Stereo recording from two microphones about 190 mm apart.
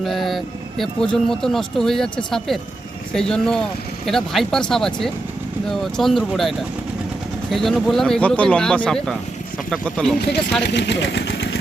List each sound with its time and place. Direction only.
0.0 s speech: centre (ahead or behind)
10.6 s speech: 65° left (ahead or behind)